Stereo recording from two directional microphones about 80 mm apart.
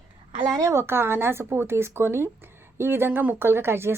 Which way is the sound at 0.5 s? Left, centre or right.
Right.